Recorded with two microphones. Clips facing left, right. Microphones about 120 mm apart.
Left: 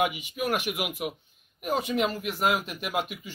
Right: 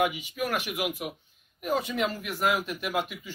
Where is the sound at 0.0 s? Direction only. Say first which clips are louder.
Even; 15° left (ahead or behind).